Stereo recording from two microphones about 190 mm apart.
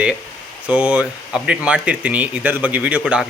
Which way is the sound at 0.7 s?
5° right (ahead or behind).